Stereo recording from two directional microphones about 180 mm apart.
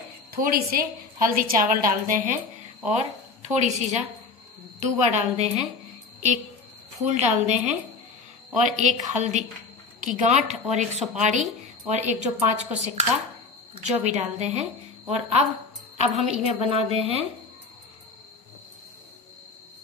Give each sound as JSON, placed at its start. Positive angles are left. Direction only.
{"t": 0.3, "sound": "a woman's voice", "side_deg": -55}
{"t": 7.0, "sound": "speech", "side_deg": -40}
{"t": 8.6, "sound": "speech", "side_deg": -40}